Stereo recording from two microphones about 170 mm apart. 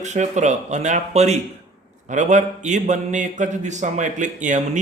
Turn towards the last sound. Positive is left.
turn(degrees=-45)  # may be behind; listen again after turning